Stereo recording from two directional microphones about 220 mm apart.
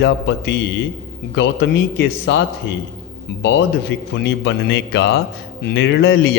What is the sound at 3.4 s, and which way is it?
A man's voice, 55° left (ahead or behind).